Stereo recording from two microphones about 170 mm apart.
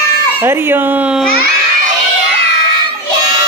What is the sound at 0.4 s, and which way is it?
Speech, 10° right (ahead or behind).